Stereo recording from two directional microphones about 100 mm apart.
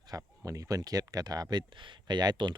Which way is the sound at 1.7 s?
55° right (ahead or behind).